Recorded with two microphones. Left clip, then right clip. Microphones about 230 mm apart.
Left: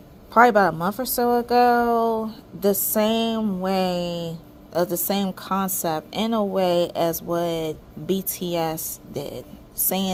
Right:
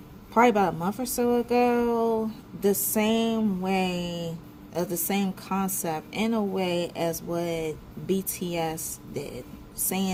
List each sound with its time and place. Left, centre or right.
0.3 s a woman's voice: left